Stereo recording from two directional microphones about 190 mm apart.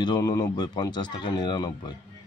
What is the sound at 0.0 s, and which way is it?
Speech, 20° left (ahead or behind).